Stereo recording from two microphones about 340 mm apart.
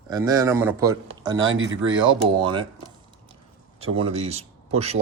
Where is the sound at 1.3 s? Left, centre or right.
Right.